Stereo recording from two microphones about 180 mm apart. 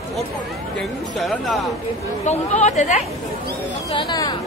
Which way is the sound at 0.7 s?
5° left (ahead or behind).